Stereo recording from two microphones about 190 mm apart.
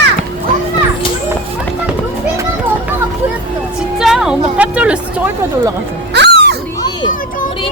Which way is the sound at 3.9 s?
5° right (ahead or behind).